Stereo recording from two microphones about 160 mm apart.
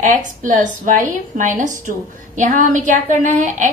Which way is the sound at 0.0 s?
55° right (ahead or behind).